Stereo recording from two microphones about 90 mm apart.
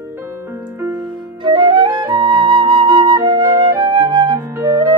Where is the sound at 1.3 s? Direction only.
60° right (ahead or behind).